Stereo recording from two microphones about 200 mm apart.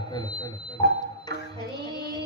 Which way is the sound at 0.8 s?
55° right (ahead or behind).